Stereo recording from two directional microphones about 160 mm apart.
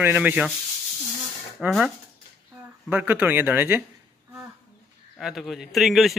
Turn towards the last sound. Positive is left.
turn(degrees=0)  # may be behind; listen again after turning